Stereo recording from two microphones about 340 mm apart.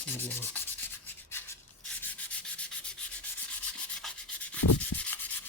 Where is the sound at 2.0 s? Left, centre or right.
Centre.